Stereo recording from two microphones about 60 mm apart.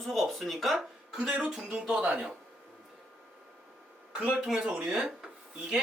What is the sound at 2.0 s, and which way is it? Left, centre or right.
Speech, right.